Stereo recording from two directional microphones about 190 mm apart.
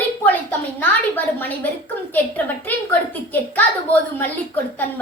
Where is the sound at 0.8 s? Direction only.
10° left (ahead or behind).